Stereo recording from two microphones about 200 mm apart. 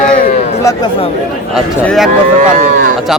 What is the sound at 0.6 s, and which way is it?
Speech, 20° left (ahead or behind).